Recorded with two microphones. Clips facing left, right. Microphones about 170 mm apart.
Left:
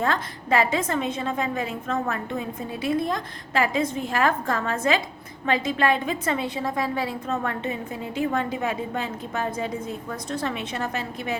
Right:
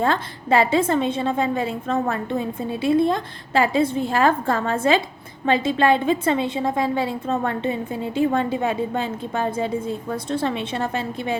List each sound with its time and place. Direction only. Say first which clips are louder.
0.0 s a woman's voice: right 4 dB; 30° right (ahead or behind)